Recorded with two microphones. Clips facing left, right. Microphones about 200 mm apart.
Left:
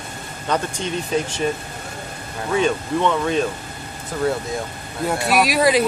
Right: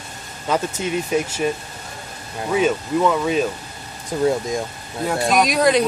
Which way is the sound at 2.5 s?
5° right (ahead or behind).